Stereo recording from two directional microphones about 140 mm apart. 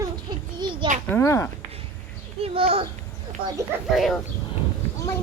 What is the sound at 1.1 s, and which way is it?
Speech, 20° left (ahead or behind).